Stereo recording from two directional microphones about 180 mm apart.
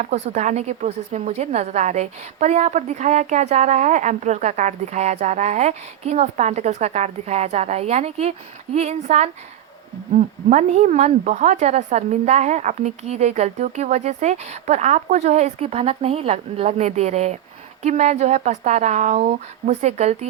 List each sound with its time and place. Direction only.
0.0 s a woman's voice: 40° right (ahead or behind)